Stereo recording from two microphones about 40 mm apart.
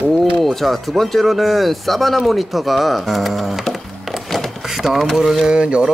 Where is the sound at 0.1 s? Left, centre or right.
Centre.